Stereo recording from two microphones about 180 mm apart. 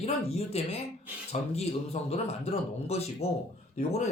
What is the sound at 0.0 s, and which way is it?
A man's voice, 35° left (ahead or behind).